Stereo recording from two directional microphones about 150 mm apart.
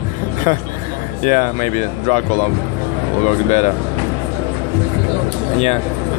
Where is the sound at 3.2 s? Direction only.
50° left (ahead or behind).